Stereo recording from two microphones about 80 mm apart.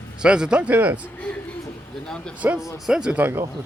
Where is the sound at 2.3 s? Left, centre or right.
Centre.